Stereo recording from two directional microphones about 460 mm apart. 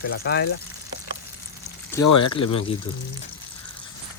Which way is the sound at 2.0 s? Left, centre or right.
Left.